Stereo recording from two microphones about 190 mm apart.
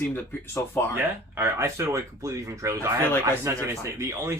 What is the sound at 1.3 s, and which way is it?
Speech, 10° right (ahead or behind).